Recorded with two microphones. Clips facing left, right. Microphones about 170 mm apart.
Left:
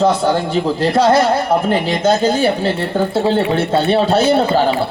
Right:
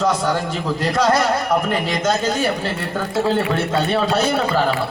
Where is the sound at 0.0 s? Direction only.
30° left (ahead or behind).